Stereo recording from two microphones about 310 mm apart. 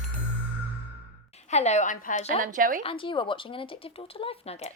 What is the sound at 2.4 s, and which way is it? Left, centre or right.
Speech, right.